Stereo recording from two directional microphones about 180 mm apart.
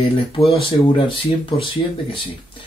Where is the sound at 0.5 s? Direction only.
30° left (ahead or behind).